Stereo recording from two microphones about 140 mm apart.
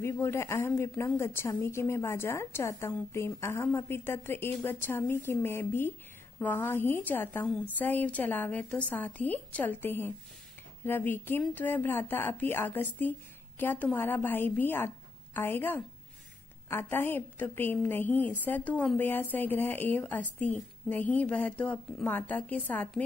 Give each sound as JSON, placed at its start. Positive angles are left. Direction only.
{"t": 0.0, "sound": "a woman's voice", "side_deg": 20}